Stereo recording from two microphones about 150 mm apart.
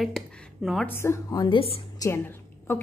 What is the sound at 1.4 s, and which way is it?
Speech, 35° left (ahead or behind).